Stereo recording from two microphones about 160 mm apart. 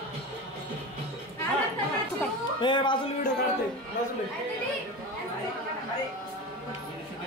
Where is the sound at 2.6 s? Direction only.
30° left (ahead or behind).